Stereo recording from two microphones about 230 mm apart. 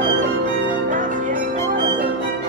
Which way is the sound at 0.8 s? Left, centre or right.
Right.